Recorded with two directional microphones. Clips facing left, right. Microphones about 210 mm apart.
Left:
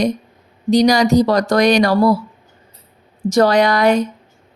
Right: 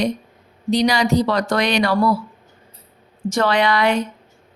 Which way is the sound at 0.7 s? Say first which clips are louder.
Left 5 dB; 40° left (ahead or behind).